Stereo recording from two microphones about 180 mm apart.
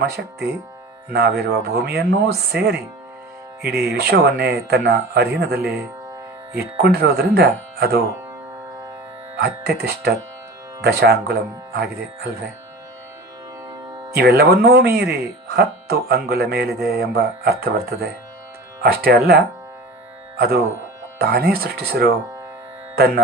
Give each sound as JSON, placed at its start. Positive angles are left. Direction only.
{"t": 0.0, "sound": "speech", "side_deg": -60}
{"t": 9.8, "sound": "speech", "side_deg": -65}
{"t": 14.1, "sound": "speech", "side_deg": -60}